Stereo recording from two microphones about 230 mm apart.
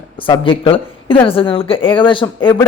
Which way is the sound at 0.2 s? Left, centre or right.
Left.